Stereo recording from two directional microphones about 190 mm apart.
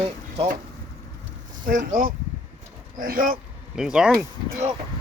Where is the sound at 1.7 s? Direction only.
45° right (ahead or behind).